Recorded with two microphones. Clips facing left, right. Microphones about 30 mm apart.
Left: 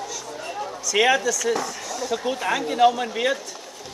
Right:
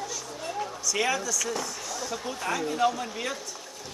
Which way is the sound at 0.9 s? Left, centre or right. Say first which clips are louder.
Left 9 dB; left.